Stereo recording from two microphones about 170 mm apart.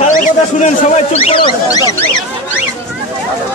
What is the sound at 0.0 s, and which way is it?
Speech, 45° left (ahead or behind).